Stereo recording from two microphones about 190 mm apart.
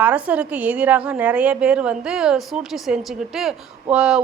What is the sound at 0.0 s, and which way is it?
A woman's voice, 10° right (ahead or behind).